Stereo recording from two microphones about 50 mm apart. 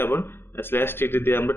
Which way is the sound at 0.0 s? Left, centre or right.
Left.